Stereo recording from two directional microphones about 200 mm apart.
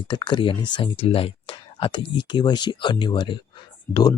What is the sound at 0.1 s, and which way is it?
Speech, 25° left (ahead or behind).